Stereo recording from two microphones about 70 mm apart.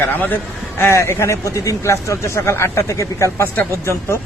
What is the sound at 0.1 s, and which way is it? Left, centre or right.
Speech, left.